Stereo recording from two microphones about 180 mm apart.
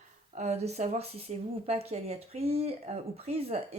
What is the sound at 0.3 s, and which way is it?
Speech, 35° right (ahead or behind).